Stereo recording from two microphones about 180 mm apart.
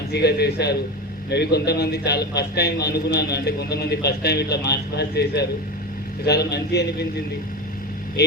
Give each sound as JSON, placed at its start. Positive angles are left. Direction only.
{"t": 0.1, "sound": "a man's voice", "side_deg": 65}